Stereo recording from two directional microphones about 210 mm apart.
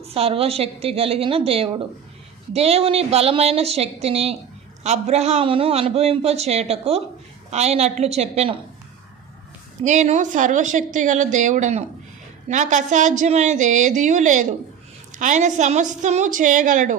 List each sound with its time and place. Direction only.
0.1 s a man's voice: 25° right (ahead or behind)
9.8 s a woman's voice: 35° right (ahead or behind)